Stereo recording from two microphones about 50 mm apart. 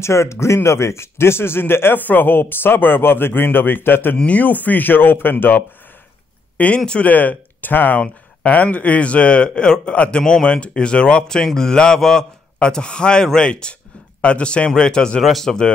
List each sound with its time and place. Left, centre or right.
0.0 s a man's voice: left
2.0 s a man's voice: left
6.9 s a man's voice: left
15.2 s a man's voice: centre